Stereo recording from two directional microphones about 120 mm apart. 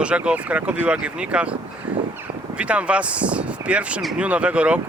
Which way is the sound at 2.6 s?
10° right (ahead or behind).